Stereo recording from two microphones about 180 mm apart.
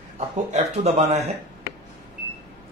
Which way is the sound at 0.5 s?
40° right (ahead or behind).